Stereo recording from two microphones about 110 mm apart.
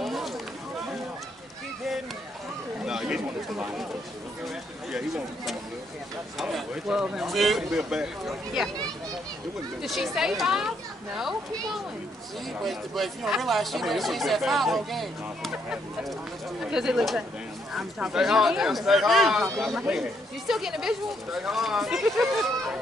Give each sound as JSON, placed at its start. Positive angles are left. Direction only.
{"t": 0.0, "sound": "a sound", "side_deg": 0}
{"t": 2.8, "sound": "speech", "side_deg": -5}
{"t": 4.9, "sound": "speech", "side_deg": 0}
{"t": 9.8, "sound": "speech", "side_deg": 0}
{"t": 12.6, "sound": "speech", "side_deg": 0}